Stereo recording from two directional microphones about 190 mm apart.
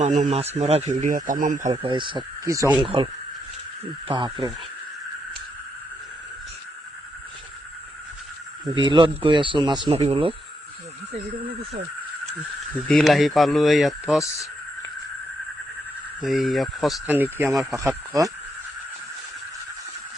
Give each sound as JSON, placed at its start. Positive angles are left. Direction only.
{"t": 0.0, "sound": "speech", "side_deg": -40}
{"t": 1.7, "sound": "speech", "side_deg": -25}
{"t": 2.8, "sound": "speech", "side_deg": -30}
{"t": 4.1, "sound": "speech", "side_deg": -25}
{"t": 8.7, "sound": "speech", "side_deg": -25}
{"t": 12.7, "sound": "speech", "side_deg": 0}
{"t": 16.2, "sound": "speech", "side_deg": 0}